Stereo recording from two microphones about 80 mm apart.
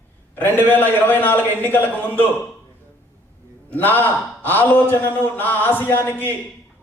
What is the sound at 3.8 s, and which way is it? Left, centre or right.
A man's voice, left.